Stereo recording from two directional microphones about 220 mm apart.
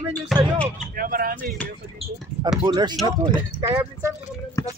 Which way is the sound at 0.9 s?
40° right (ahead or behind).